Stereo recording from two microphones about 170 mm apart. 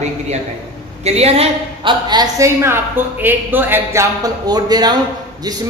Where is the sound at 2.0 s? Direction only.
25° right (ahead or behind).